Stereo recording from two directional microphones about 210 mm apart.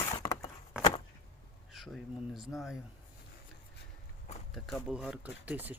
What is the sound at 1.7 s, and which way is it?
Speech, centre (ahead or behind).